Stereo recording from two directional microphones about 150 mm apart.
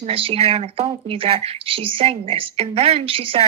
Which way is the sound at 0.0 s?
40° right (ahead or behind).